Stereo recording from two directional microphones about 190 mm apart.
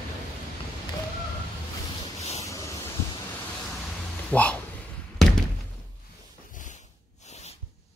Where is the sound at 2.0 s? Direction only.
35° left (ahead or behind).